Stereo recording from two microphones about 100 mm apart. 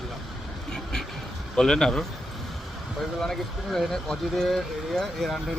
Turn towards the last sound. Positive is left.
turn(degrees=0)  # may be behind; listen again after turning